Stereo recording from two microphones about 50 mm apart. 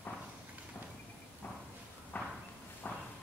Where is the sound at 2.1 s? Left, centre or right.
Left.